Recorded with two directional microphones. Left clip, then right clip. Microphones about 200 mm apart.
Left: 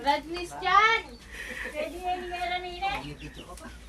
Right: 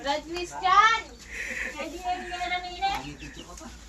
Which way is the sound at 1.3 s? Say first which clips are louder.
Right 4 dB; centre (ahead or behind).